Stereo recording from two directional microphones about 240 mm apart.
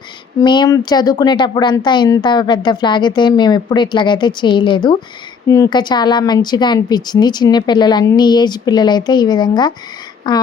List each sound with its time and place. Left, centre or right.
0.3 s speech: centre